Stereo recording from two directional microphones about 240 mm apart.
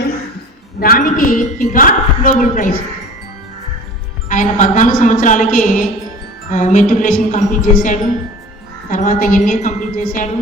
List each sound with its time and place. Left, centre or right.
0.8 s a woman's voice: left
4.3 s a woman's voice: left